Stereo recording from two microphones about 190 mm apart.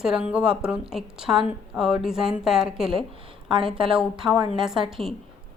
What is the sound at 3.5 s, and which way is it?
Speech, 25° right (ahead or behind).